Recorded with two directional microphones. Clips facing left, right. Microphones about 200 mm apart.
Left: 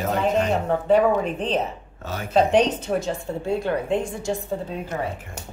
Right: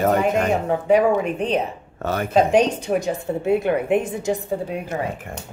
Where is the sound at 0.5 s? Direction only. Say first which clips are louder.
Right 2 dB; 10° right (ahead or behind).